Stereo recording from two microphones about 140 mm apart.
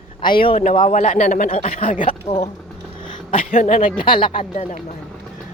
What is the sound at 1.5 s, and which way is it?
Speech, 50° left (ahead or behind).